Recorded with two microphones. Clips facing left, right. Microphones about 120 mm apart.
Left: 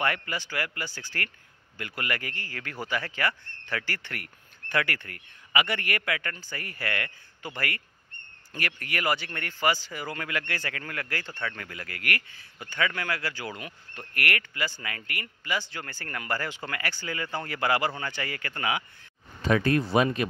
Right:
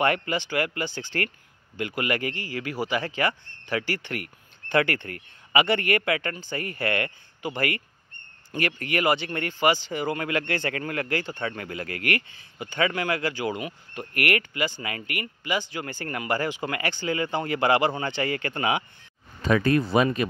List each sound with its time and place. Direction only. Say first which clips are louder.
0.0 s speech: right 6 dB; 25° right (ahead or behind)